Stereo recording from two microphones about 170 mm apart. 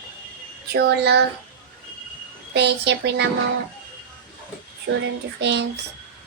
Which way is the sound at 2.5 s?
85° right.